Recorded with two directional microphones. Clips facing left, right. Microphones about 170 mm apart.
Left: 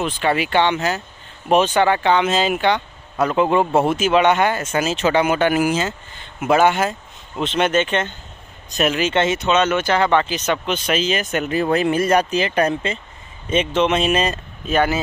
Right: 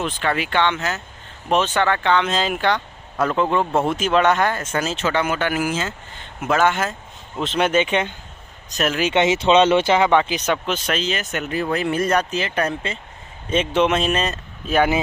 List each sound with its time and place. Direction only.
0.0 s speech: 10° left (ahead or behind)
7.4 s speech: 5° right (ahead or behind)
8.7 s speech: 5° left (ahead or behind)
9.0 s speech: 15° right (ahead or behind)
9.4 s speech: 30° right (ahead or behind)
9.9 s speech: 10° right (ahead or behind)
10.9 s speech: 10° left (ahead or behind)
11.7 s speech: 20° left (ahead or behind)
13.7 s speech: 5° right (ahead or behind)
14.0 s speech: 10° left (ahead or behind)
14.7 s speech: 10° right (ahead or behind)